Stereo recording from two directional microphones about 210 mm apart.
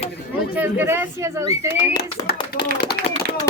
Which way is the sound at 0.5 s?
10° right (ahead or behind).